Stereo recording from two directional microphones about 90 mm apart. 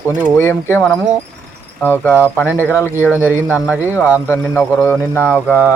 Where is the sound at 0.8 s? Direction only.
5° left (ahead or behind).